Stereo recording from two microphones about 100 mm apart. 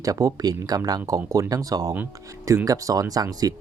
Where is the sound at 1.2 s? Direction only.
30° right (ahead or behind).